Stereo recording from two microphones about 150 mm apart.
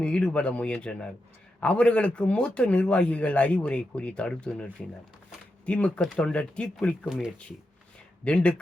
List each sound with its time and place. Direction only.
0.0 s a man's voice: 10° left (ahead or behind)
8.2 s a man's voice: 5° left (ahead or behind)